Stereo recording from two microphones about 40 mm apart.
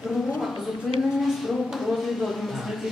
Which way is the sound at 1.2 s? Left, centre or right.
Centre.